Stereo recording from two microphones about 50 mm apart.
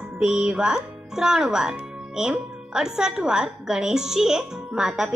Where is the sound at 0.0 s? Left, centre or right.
Centre.